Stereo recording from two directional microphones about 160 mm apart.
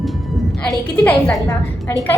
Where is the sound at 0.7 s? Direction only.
Centre (ahead or behind).